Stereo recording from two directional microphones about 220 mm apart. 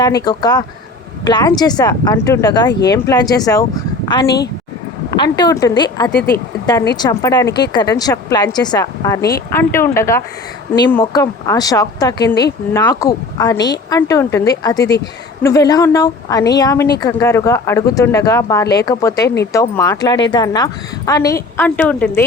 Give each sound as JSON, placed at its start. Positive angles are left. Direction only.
{"t": 0.0, "sound": "a woman's voice", "side_deg": 15}
{"t": 6.1, "sound": "speech", "side_deg": 45}
{"t": 6.9, "sound": "a woman's voice", "side_deg": 15}
{"t": 12.3, "sound": "speech", "side_deg": 50}
{"t": 12.7, "sound": "a woman's voice", "side_deg": 15}